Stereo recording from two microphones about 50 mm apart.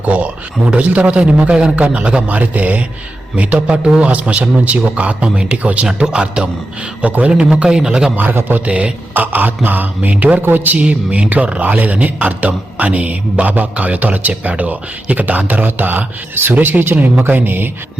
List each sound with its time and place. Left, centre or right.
0.0 s a man's voice: right
7.6 s a man's voice: centre
8.1 s a man's voice: right
8.6 s a man's voice: right
9.1 s a man's voice: right
10.8 s a man's voice: right